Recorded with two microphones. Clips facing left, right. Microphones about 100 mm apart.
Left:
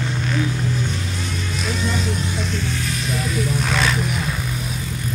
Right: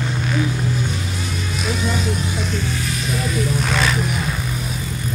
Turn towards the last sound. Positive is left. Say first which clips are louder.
# right 1 dB
turn(degrees=0)  # may be behind; listen again after turning